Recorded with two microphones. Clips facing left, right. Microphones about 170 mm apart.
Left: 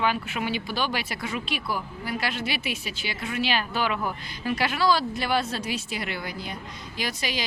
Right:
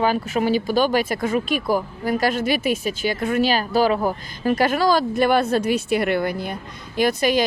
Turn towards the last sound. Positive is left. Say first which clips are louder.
# right 12 dB
turn(degrees=-50)  # may be behind; listen again after turning